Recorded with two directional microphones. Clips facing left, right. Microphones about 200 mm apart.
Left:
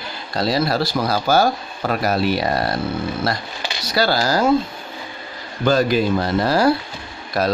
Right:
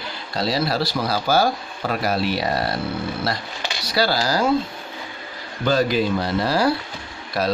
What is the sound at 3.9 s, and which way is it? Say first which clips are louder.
Speech: left 2 dB; 50° left (ahead or behind).